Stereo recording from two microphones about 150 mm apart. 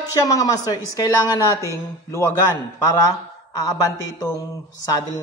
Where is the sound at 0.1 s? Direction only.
25° left (ahead or behind).